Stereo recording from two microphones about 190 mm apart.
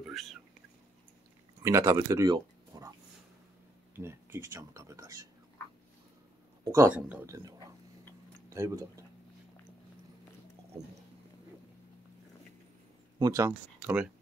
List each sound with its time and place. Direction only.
0.0 s whispering: centre (ahead or behind)
1.6 s speech: 15° right (ahead or behind)
3.9 s speech: 15° right (ahead or behind)
6.6 s speech: 15° right (ahead or behind)
13.2 s speech: 15° right (ahead or behind)